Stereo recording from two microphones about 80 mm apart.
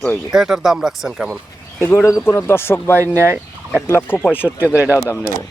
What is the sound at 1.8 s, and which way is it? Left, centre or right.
Speech, left.